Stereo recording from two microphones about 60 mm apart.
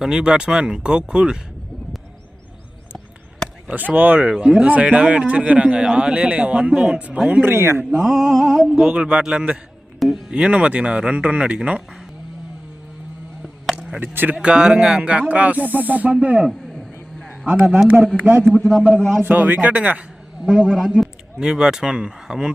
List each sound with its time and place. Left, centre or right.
0.0 s a man's voice: centre
3.7 s speech: right
4.2 s a man's voice: centre
7.4 s speech: right
7.9 s a man's voice: centre
14.0 s speech: right
14.3 s a man's voice: centre
16.5 s a sound: centre
17.4 s a man's voice: right
18.5 s a man's voice: centre
19.2 s speech: right
20.4 s a man's voice: centre